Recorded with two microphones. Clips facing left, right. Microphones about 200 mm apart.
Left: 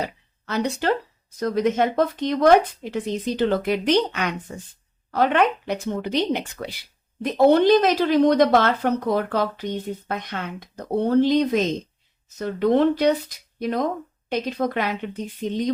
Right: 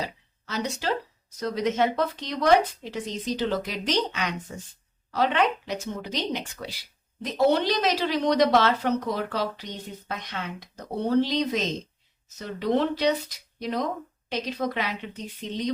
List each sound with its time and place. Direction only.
0.0 s speech: 60° left (ahead or behind)